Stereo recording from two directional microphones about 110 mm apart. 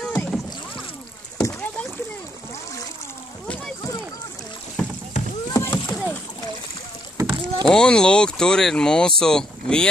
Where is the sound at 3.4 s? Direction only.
10° left (ahead or behind).